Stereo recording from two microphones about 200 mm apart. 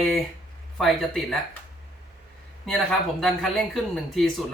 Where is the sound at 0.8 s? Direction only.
Centre (ahead or behind).